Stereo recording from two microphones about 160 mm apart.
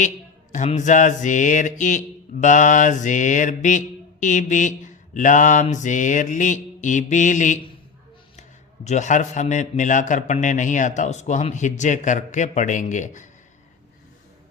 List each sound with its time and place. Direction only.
0.5 s a man's voice: 45° left (ahead or behind)